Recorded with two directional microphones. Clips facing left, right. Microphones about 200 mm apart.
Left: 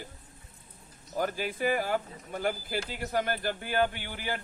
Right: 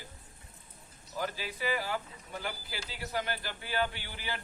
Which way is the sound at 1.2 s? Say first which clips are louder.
Left 6 dB; 50° left (ahead or behind).